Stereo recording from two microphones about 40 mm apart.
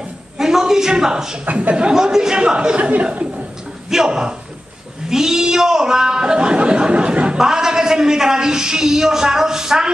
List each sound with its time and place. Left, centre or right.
0.4 s a woman's voice: centre
1.4 s speech: right
1.9 s speech: centre
3.9 s speech: centre
7.3 s a woman's voice: centre